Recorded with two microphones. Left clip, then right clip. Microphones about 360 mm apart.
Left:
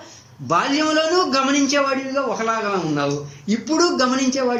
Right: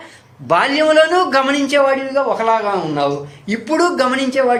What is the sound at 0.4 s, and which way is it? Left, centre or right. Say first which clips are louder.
A man's voice: right 6 dB; centre.